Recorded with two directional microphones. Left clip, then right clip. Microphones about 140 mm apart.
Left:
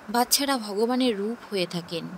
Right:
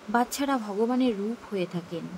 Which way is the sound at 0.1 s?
65° left (ahead or behind).